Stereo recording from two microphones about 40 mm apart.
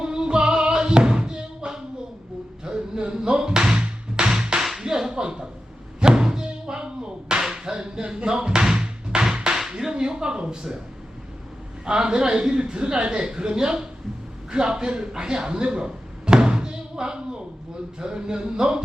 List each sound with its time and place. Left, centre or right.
0.0 s music: right
4.8 s a sound: centre
9.6 s whip: centre
11.9 s a man's voice: centre